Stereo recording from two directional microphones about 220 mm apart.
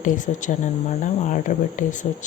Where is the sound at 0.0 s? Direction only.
35° left (ahead or behind).